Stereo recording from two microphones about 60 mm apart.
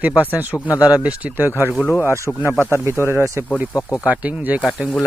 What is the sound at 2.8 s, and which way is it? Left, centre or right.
Speech, right.